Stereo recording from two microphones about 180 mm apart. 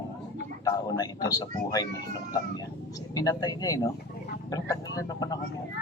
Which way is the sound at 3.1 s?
20° left (ahead or behind).